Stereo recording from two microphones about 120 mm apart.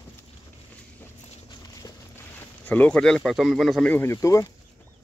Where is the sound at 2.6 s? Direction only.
10° left (ahead or behind).